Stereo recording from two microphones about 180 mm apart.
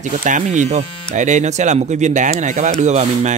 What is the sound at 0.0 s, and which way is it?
Speech, 45° right (ahead or behind).